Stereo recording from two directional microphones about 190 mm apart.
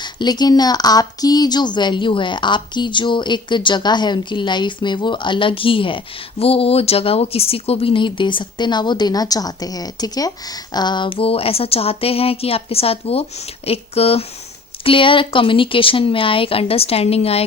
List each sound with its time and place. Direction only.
0.0 s speech: 20° left (ahead or behind)